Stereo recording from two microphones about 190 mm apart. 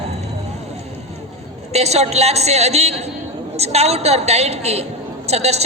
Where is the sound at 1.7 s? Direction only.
35° right (ahead or behind).